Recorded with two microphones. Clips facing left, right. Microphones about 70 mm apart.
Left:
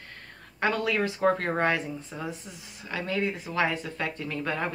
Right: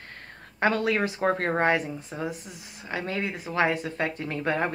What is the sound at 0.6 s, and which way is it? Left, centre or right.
Speech, right.